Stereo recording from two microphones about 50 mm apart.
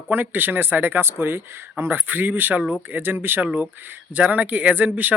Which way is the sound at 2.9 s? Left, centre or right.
Right.